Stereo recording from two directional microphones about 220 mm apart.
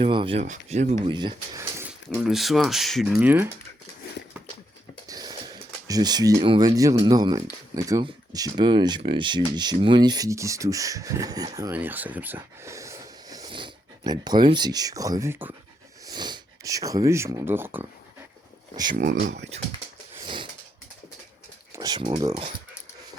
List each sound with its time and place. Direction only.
0.0 s speech: 25° right (ahead or behind)
1.0 s speech: 20° right (ahead or behind)
2.1 s speech: centre (ahead or behind)
5.0 s speech: 15° right (ahead or behind)
18.9 s speech: 35° right (ahead or behind)
20.2 s wheeze: 20° right (ahead or behind)
21.8 s speech: 15° right (ahead or behind)